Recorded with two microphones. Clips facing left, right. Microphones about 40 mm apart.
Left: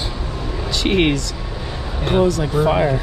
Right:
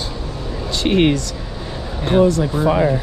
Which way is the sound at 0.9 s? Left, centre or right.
Left.